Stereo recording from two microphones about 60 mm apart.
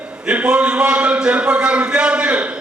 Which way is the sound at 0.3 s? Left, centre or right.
Centre.